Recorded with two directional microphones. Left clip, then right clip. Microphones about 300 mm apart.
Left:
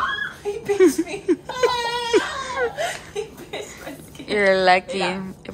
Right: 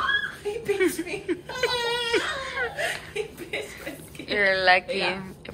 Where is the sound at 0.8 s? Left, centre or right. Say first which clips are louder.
Left 8 dB; centre.